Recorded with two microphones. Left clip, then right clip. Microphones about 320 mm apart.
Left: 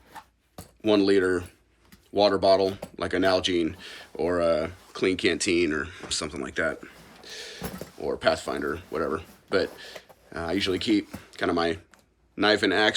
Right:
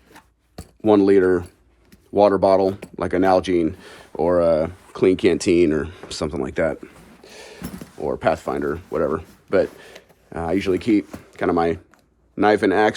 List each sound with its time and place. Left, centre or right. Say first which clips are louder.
0.9 s speech: right 7 dB; centre